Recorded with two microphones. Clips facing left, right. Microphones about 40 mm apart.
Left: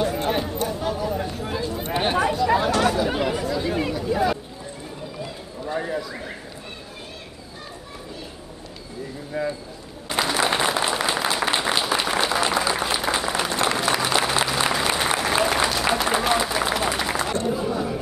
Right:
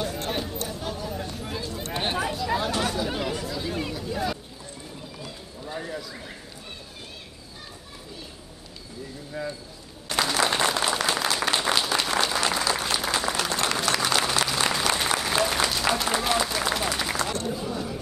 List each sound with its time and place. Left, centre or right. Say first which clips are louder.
0.0 s a sound: left 6 dB; centre
9.3 s speech: left 6 dB; centre
10.0 s applause: left 2 dB; centre